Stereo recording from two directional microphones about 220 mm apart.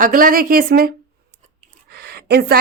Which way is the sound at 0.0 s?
40° right (ahead or behind).